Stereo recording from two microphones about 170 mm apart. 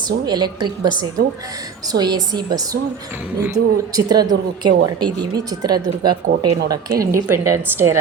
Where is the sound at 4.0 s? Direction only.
25° right (ahead or behind).